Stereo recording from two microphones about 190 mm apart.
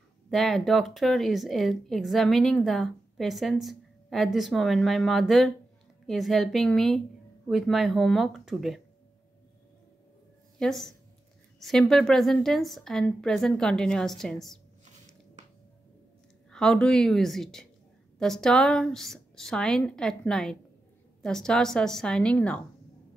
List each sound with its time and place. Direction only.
0.3 s a woman's voice: centre (ahead or behind)
10.6 s a woman's voice: centre (ahead or behind)
16.4 s a woman's voice: 5° left (ahead or behind)